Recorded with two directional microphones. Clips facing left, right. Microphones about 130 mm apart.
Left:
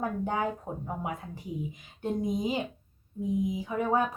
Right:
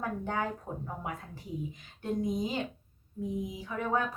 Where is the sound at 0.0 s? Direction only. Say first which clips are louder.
Left 3 dB; 20° left (ahead or behind).